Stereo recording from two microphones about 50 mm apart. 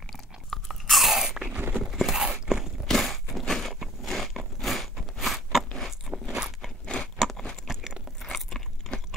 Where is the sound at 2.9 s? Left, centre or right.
Centre.